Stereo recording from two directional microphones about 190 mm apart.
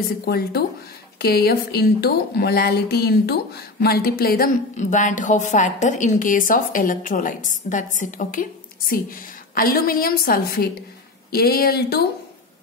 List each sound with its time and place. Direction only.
0.2 s a woman's voice: 55° left (ahead or behind)
4.7 s a woman's voice: 40° left (ahead or behind)